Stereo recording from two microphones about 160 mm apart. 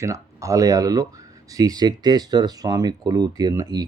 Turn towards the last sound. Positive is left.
turn(degrees=-20)  # may be behind; listen again after turning